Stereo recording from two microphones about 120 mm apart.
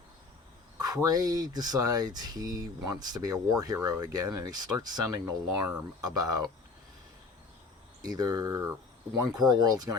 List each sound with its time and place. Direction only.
0.8 s speech: 30° right (ahead or behind)
8.0 s speech: 35° right (ahead or behind)